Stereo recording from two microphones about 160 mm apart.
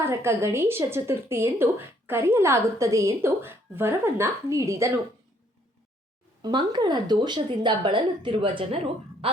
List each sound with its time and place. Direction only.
0.0 s speech: 15° right (ahead or behind)
6.4 s speech: 30° right (ahead or behind)